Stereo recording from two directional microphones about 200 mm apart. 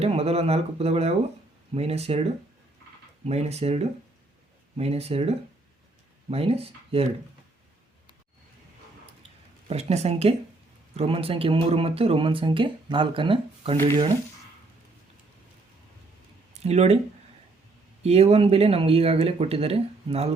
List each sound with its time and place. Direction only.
0.0 s speech: 30° right (ahead or behind)
9.6 s speech: 30° right (ahead or behind)
16.6 s speech: 35° right (ahead or behind)
18.0 s speech: 30° right (ahead or behind)